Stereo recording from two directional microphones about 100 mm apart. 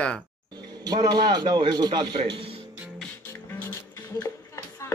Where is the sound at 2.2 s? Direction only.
70° right (ahead or behind).